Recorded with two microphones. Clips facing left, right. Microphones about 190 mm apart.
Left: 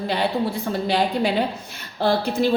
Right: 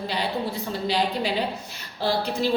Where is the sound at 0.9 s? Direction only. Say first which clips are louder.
Left 3 dB; 50° left (ahead or behind).